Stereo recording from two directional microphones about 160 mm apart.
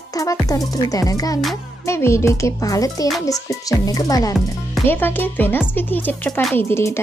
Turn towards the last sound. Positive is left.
turn(degrees=15)  # may be behind; listen again after turning